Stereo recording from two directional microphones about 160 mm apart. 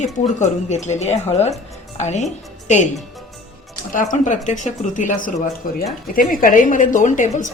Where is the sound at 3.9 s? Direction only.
55° left (ahead or behind).